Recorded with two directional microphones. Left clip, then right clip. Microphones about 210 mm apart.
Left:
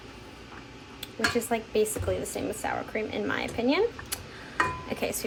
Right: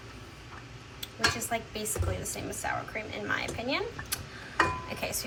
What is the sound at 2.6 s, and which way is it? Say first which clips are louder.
A woman's voice: even; 50° left (ahead or behind).